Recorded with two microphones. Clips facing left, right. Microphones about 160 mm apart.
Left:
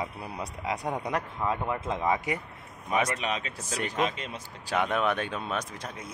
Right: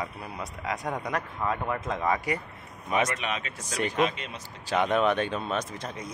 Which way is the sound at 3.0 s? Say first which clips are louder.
Left 1 dB; 35° left (ahead or behind).